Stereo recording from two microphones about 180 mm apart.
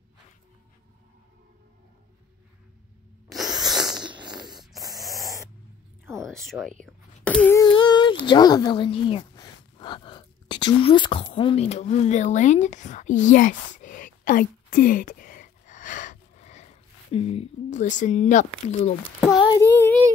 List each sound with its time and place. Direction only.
3.3 s a sound: centre (ahead or behind)
4.4 s snort: centre (ahead or behind)
5.0 s spray: centre (ahead or behind)
6.2 s speech: centre (ahead or behind)
7.2 s a sound: 10° left (ahead or behind)
7.6 s female singing: 25° left (ahead or behind)
8.3 s speech: 20° left (ahead or behind); by 18.9 s 40° left (ahead or behind)
19.1 s a child's voice: centre (ahead or behind)